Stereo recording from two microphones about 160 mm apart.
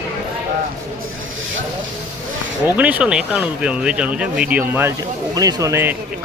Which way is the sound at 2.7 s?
10° right (ahead or behind).